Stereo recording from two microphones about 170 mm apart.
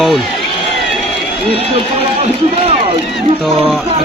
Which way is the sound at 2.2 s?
40° right (ahead or behind).